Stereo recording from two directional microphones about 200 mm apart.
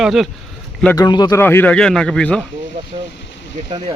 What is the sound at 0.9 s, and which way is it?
Speech, 20° left (ahead or behind).